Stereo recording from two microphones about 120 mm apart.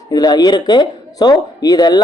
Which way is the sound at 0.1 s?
35° left (ahead or behind).